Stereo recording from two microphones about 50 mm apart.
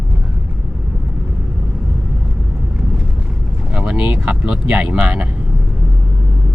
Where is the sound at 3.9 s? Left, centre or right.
Right.